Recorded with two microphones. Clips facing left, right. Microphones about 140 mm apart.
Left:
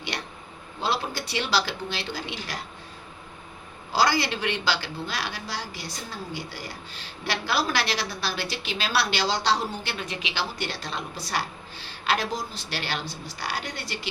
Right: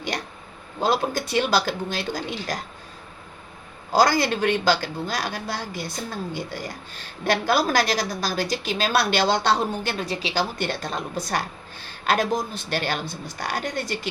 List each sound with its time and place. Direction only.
0.1 s a woman's voice: 45° right (ahead or behind)
3.9 s a woman's voice: 45° right (ahead or behind)
10.6 s a woman's voice: 50° right (ahead or behind)